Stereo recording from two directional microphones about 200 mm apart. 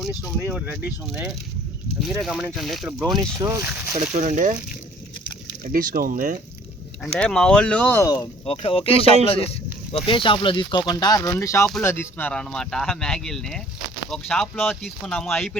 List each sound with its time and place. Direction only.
0.0 s speech: 5° right (ahead or behind)
3.3 s speech: 15° right (ahead or behind)
4.1 s speech: 40° right (ahead or behind)
5.6 s speech: 45° right (ahead or behind)
7.2 s speech: 5° left (ahead or behind)
8.4 s speech: 30° left (ahead or behind); by 15.5 s centre (ahead or behind)